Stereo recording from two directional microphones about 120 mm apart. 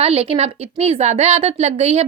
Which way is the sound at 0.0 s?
55° right (ahead or behind).